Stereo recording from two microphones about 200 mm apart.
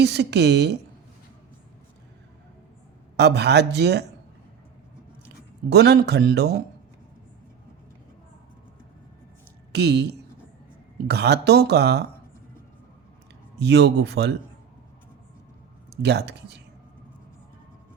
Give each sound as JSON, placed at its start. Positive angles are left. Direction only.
{"t": 0.0, "sound": "speech", "side_deg": -55}
{"t": 3.2, "sound": "speech", "side_deg": -55}
{"t": 5.6, "sound": "speech", "side_deg": -55}
{"t": 9.7, "sound": "speech", "side_deg": -55}
{"t": 13.6, "sound": "speech", "side_deg": -55}
{"t": 15.9, "sound": "speech", "side_deg": -55}